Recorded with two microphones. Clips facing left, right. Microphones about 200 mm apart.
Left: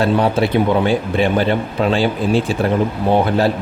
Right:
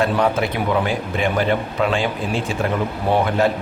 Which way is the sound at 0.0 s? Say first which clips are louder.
Left 3 dB; 30° left (ahead or behind).